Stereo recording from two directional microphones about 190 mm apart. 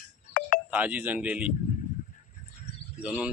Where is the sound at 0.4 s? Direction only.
50° left (ahead or behind).